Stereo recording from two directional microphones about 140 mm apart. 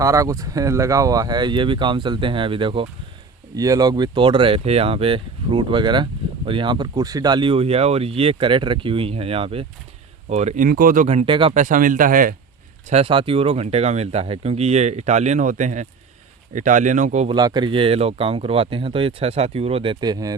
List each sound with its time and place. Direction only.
0.0 s speech: 25° right (ahead or behind)
3.5 s speech: 25° right (ahead or behind); by 9.6 s 40° right (ahead or behind)
10.2 s speech: 55° right (ahead or behind); by 11.1 s 75° right (ahead or behind)
11.3 s speech: 35° right (ahead or behind)
11.5 s speech: 65° right (ahead or behind)
12.9 s speech: 40° right (ahead or behind); by 17.2 s 60° right (ahead or behind)
17.2 s speech: 30° right (ahead or behind)